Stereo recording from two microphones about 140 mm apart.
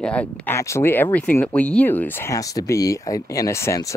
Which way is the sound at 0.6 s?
20° left (ahead or behind).